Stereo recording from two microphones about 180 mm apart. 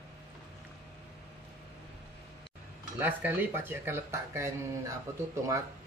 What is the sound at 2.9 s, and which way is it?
Speech, 10° right (ahead or behind).